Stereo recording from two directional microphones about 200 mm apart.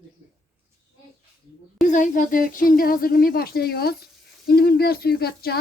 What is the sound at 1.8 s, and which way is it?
Speech, 40° left (ahead or behind).